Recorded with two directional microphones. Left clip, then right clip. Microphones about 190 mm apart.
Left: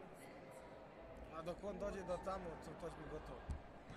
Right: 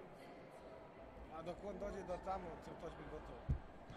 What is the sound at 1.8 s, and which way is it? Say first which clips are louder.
Speech: left 1 dB; 35° left (ahead or behind).